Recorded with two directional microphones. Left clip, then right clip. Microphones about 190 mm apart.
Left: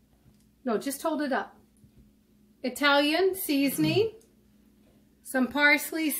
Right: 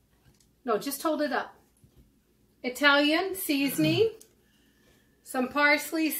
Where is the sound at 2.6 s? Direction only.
55° left (ahead or behind).